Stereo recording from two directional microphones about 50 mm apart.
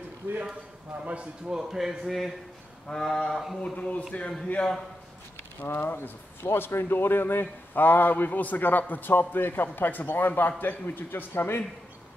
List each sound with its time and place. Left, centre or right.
0.2 s speech: right
1.5 s a man's voice: centre
2.9 s a sound: centre
3.6 s a man's voice: left
5.6 s speech: left